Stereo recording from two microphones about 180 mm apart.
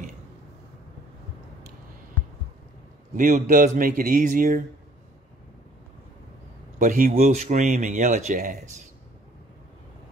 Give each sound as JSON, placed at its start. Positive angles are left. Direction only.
{"t": 3.2, "sound": "speech", "side_deg": -45}
{"t": 6.8, "sound": "speech", "side_deg": -45}